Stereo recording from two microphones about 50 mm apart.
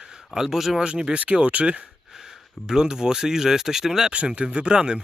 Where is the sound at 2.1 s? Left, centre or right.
Centre.